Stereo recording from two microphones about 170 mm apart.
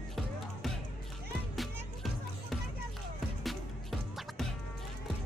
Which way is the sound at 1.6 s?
Centre (ahead or behind).